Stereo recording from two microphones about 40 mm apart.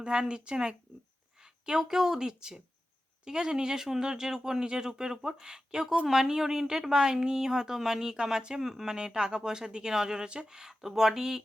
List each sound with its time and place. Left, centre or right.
0.0 s a woman's voice: right
9.0 s speech: right